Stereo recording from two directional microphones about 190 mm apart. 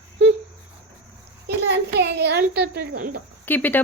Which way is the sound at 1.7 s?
65° right (ahead or behind).